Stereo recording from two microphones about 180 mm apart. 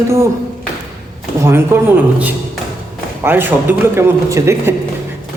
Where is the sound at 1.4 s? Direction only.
15° right (ahead or behind).